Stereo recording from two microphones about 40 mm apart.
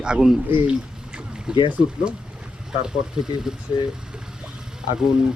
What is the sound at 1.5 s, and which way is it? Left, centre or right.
Speech, right.